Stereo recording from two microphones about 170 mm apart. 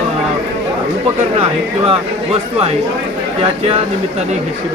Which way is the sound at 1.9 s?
35° right (ahead or behind).